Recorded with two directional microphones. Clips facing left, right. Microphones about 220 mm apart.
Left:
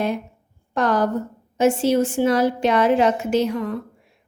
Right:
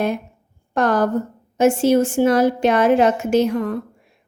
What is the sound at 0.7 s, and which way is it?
A woman's voice, 45° right (ahead or behind).